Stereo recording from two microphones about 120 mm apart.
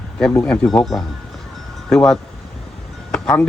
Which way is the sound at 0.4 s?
5° left (ahead or behind).